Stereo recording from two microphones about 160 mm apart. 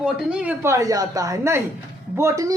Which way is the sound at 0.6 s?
20° right (ahead or behind).